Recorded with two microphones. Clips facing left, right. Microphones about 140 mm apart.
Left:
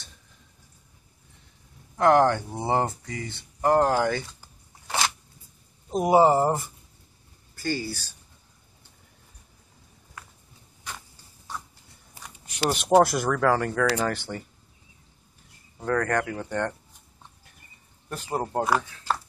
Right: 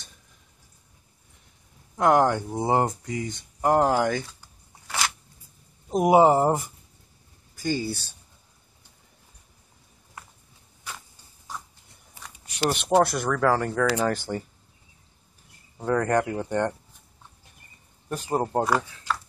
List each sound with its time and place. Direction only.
2.0 s speech: 10° right (ahead or behind)
4.8 s scissors: 25° left (ahead or behind)
5.9 s speech: 10° right (ahead or behind)
12.5 s speech: centre (ahead or behind)
15.8 s speech: 15° right (ahead or behind)
18.3 s speech: 15° right (ahead or behind)
19.1 s clip-clop: 30° left (ahead or behind)